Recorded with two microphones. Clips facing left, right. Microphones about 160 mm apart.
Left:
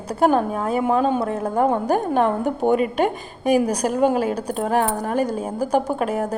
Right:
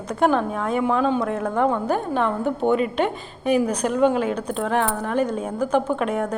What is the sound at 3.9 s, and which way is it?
A woman's voice, 40° left (ahead or behind).